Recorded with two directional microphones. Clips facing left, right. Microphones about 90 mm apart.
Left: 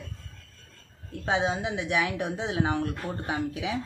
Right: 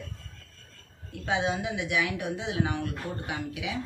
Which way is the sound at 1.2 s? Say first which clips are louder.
Left 2 dB; 30° left (ahead or behind).